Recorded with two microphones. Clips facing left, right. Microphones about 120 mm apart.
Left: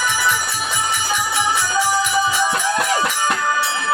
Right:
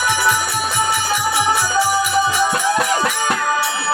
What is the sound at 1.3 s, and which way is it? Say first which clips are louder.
Music: right 4 dB; 10° right (ahead or behind).